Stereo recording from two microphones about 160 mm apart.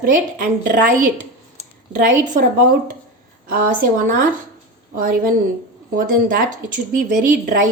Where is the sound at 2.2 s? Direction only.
50° right (ahead or behind).